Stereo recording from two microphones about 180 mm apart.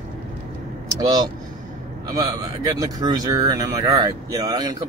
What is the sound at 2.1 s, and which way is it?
Speech, 20° right (ahead or behind).